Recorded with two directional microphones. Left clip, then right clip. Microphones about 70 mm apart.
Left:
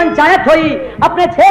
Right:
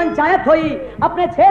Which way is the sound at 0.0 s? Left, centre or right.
Right.